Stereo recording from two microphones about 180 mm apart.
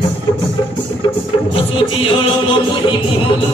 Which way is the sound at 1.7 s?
30° left (ahead or behind).